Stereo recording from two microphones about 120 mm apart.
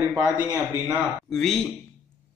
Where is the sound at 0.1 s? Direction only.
5° right (ahead or behind).